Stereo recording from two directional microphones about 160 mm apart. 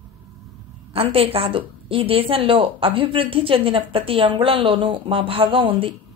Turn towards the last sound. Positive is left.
turn(degrees=-35)  # may be behind; listen again after turning